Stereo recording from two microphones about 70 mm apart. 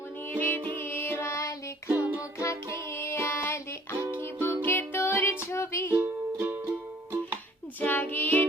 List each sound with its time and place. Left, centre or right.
0.3 s music: left
1.9 s music: right
2.4 s music: left
5.9 s music: right
7.8 s child singing: left